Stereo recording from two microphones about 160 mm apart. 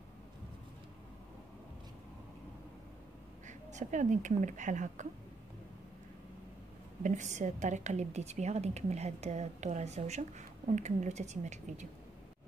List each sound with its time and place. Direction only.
3.4 s a woman's voice: 50° right (ahead or behind)
7.0 s a woman's voice: 50° right (ahead or behind)